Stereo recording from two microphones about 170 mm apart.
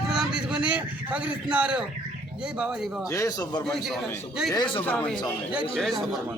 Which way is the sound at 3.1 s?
20° left (ahead or behind).